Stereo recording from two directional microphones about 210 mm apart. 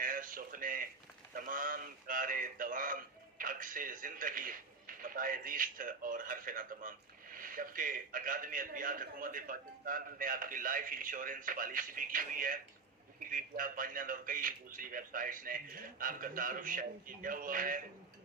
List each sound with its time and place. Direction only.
0.0 s speech: 40° right (ahead or behind)